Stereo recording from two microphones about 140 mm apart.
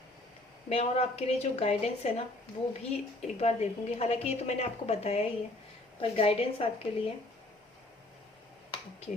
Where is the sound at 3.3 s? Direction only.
50° left (ahead or behind).